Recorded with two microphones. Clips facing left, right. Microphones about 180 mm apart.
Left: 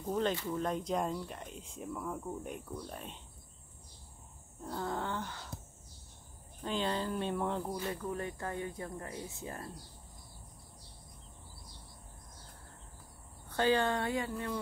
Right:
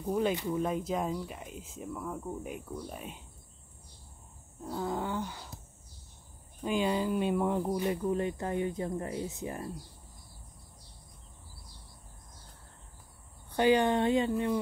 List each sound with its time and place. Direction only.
0.0 s speech: 10° right (ahead or behind)
4.6 s speech: 5° right (ahead or behind)
6.6 s speech: 10° right (ahead or behind)
13.5 s speech: 15° right (ahead or behind)